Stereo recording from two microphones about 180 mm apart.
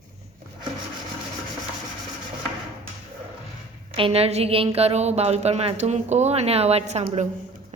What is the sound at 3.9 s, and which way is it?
A woman's voice, 30° right (ahead or behind).